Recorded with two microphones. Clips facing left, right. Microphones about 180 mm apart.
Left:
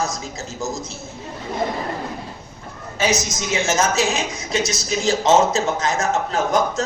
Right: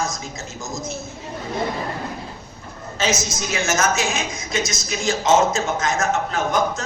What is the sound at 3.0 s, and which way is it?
Speech, 15° left (ahead or behind).